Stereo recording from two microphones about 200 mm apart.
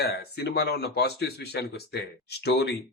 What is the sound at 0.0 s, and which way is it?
Speech, 55° left (ahead or behind).